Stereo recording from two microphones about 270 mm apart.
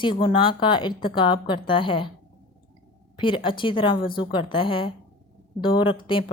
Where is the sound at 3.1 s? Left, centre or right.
Centre.